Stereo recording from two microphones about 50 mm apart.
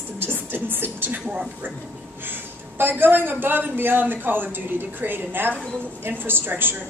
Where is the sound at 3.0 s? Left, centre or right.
Right.